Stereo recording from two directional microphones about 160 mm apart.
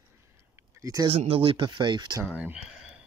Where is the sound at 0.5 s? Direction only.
20° right (ahead or behind).